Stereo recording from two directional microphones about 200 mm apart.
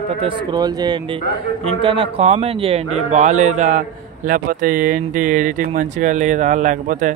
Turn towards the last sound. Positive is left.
turn(degrees=-40)  # may be behind; listen again after turning